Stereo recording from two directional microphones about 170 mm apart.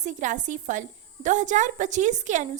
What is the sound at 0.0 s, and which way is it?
A woman's voice, 45° right (ahead or behind).